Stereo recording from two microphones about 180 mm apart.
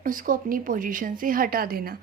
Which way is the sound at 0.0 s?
50° right (ahead or behind).